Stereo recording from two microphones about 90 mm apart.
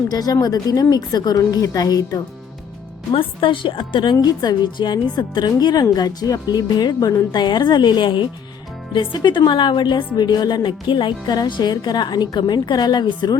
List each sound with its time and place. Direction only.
0.1 s speech: 45° left (ahead or behind)
3.1 s a woman's voice: 75° left (ahead or behind); by 13.4 s 50° left (ahead or behind)